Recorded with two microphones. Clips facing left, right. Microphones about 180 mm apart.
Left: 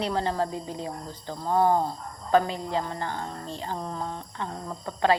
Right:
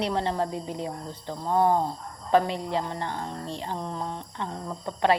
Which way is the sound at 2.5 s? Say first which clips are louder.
Right 1 dB; 25° right (ahead or behind).